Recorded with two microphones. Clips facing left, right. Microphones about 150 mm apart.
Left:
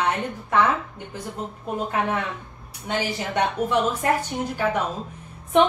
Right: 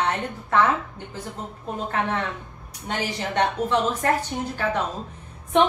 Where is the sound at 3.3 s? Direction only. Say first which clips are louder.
Even; 10° left (ahead or behind).